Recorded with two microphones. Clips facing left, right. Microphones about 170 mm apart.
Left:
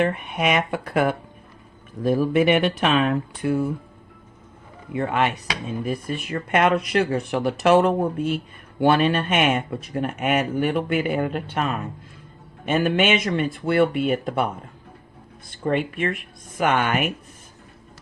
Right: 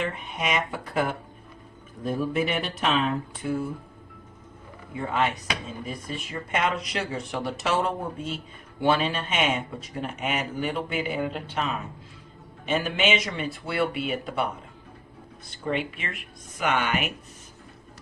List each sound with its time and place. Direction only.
0.0 s speech: 60° left (ahead or behind)
4.9 s speech: 65° left (ahead or behind); by 14.4 s 50° left (ahead or behind)
15.4 s speech: 50° left (ahead or behind)